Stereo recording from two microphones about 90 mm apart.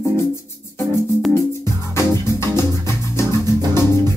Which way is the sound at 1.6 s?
35° left (ahead or behind).